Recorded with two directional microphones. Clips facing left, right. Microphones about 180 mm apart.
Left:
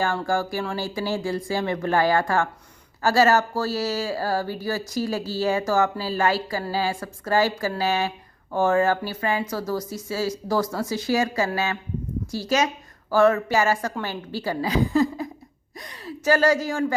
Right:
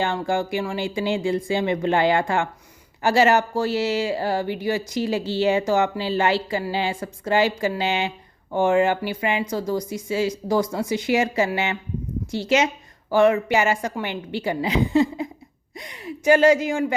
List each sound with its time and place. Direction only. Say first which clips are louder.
0.0 s speech: right 1 dB; 20° right (ahead or behind)
15.7 s gasp: right 2 dB; 20° right (ahead or behind)